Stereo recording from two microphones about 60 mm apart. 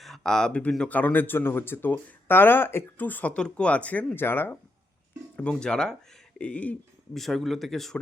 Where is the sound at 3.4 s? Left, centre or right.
Centre.